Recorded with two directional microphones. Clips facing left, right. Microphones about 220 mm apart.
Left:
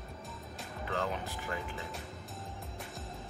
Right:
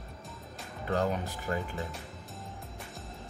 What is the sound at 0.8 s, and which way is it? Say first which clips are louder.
Speech: right 6 dB; 40° right (ahead or behind).